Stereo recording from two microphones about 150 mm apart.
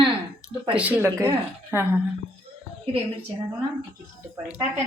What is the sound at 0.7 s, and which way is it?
Speech, 10° right (ahead or behind).